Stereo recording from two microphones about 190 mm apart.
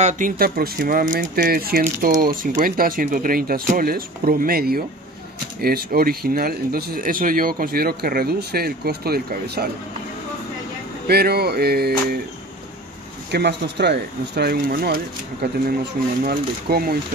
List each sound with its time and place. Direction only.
0.0 s speech: 50° right (ahead or behind)
11.1 s speech: 55° right (ahead or behind)
13.3 s speech: 60° right (ahead or behind)